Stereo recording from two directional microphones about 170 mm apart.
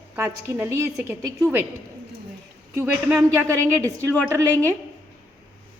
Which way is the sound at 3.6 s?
10° left (ahead or behind).